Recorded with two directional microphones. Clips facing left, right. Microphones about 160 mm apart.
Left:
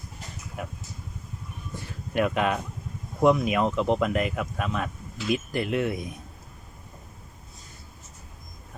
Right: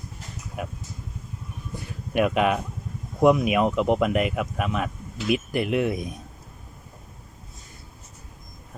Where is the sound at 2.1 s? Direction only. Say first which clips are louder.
Right 3 dB; 15° right (ahead or behind).